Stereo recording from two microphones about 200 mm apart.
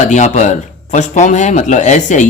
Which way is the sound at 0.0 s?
35° left (ahead or behind).